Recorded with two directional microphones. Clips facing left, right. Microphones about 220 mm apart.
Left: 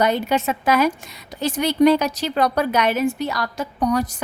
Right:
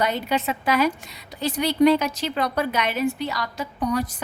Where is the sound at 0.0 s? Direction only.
45° left (ahead or behind).